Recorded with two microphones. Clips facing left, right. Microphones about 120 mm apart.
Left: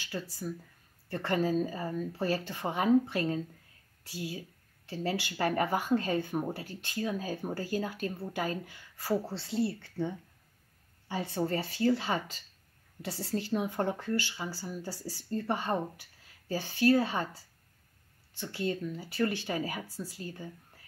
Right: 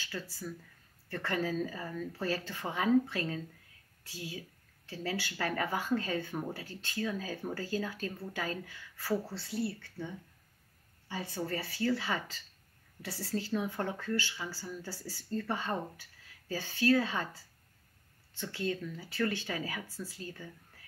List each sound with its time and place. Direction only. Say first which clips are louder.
0.0 s speech: left 3 dB; 15° left (ahead or behind)
18.4 s speech: left 2 dB; 15° left (ahead or behind)
19.4 s speech: left 4 dB; 25° left (ahead or behind)